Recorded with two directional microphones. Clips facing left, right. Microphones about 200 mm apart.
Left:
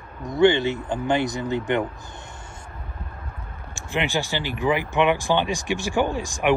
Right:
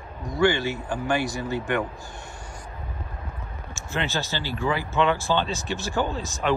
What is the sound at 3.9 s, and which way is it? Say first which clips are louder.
Speech: left 3 dB; 15° left (ahead or behind).